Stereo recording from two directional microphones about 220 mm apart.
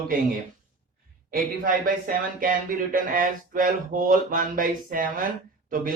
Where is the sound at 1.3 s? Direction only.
40° right (ahead or behind).